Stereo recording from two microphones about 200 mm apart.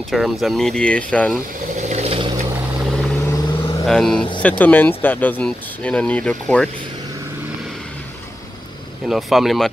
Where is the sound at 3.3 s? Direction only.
25° left (ahead or behind).